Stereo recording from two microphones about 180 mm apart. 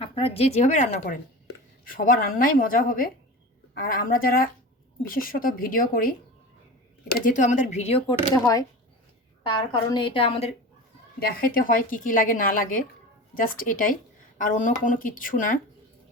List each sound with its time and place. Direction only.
0.0 s a woman's voice: 30° left (ahead or behind)
9.9 s a woman's voice: 30° left (ahead or behind)
11.2 s a woman's voice: 55° left (ahead or behind)